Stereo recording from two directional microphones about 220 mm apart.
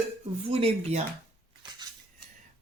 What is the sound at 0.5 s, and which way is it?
Speech, 25° right (ahead or behind).